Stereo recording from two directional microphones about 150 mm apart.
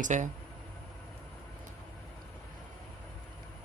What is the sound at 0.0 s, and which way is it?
Speech, 55° right (ahead or behind).